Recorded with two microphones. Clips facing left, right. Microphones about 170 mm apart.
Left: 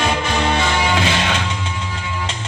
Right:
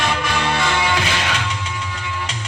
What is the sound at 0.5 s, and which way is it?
Music, 25° left (ahead or behind).